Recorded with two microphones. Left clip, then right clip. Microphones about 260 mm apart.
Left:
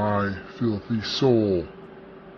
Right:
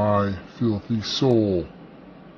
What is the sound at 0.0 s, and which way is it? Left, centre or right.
Speech, centre.